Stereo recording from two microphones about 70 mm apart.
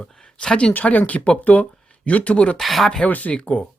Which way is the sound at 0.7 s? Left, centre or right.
Left.